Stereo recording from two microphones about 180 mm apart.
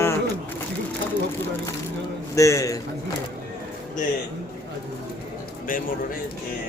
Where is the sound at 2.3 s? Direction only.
15° left (ahead or behind).